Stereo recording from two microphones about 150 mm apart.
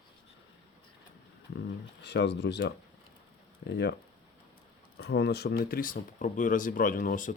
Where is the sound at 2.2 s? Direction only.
90° left.